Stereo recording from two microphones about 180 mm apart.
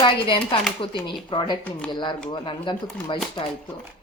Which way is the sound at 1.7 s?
10° left (ahead or behind).